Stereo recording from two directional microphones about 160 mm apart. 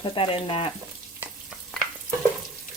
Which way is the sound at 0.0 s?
30° left (ahead or behind).